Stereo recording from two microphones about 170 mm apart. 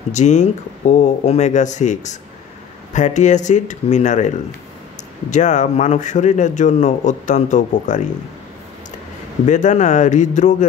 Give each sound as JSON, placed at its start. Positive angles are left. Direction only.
{"t": 0.1, "sound": "speech", "side_deg": 45}
{"t": 5.3, "sound": "speech", "side_deg": 45}
{"t": 9.5, "sound": "speech", "side_deg": 45}